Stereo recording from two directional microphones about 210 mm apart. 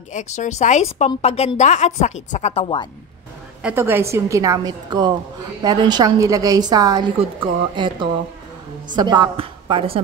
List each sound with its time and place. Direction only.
0.1 s a woman's voice: 35° left (ahead or behind)
3.6 s a woman's voice: 10° right (ahead or behind); by 10.0 s 25° right (ahead or behind)